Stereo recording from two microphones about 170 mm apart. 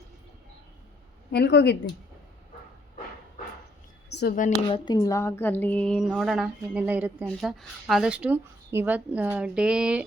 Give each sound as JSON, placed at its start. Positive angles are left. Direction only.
{"t": 1.3, "sound": "speech", "side_deg": 80}
{"t": 4.1, "sound": "speech", "side_deg": 80}
{"t": 4.7, "sound": "speech", "side_deg": 25}